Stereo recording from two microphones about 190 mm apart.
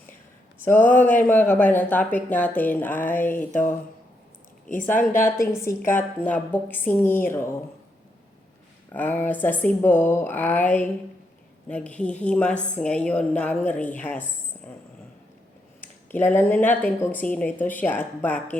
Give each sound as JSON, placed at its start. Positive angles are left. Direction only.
{"t": 0.6, "sound": "speech", "side_deg": 10}
{"t": 4.6, "sound": "speech", "side_deg": 45}
{"t": 5.5, "sound": "speech", "side_deg": 15}
{"t": 8.9, "sound": "speech", "side_deg": 10}
{"t": 15.8, "sound": "speech", "side_deg": 10}